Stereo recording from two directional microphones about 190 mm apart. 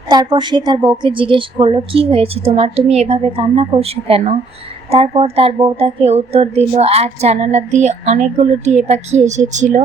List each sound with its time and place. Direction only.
0.1 s a woman's voice: 25° right (ahead or behind); by 9.8 s 40° right (ahead or behind)